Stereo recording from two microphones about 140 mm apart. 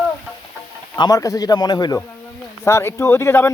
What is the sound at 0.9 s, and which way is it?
Speech, 25° left (ahead or behind).